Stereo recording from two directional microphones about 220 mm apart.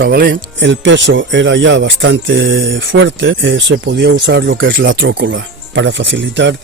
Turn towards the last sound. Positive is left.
turn(degrees=-55)  # may be behind; listen again after turning